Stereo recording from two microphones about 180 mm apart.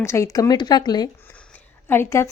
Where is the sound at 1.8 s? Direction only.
15° left (ahead or behind).